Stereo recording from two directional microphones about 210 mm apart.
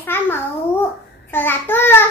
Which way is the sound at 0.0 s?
10° left (ahead or behind).